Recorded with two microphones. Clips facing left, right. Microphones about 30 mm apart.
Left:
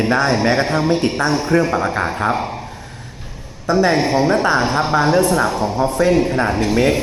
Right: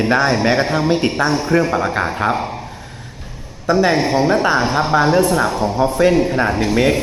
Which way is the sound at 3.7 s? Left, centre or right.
Centre.